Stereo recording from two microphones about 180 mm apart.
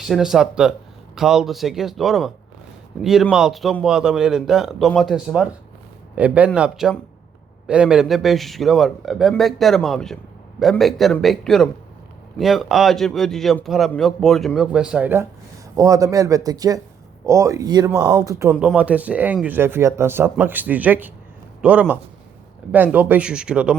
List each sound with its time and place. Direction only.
0.0 s a man's voice: centre (ahead or behind)